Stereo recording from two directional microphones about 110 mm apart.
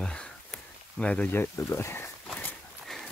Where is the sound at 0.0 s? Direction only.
5° left (ahead or behind); by 2.0 s 25° left (ahead or behind).